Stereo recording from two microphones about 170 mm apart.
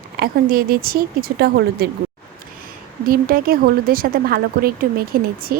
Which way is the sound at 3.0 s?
60° right (ahead or behind).